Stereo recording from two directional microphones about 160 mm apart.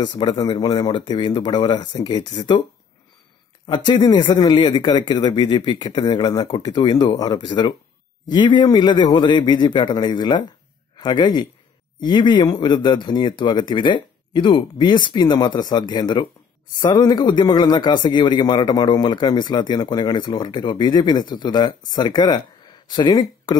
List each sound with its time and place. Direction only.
0.0 s speech: 30° left (ahead or behind)
3.6 s speech: 30° left (ahead or behind)